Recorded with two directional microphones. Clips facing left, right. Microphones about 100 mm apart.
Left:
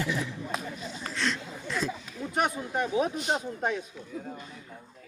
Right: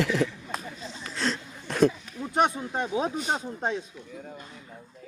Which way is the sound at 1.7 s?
60° right (ahead or behind).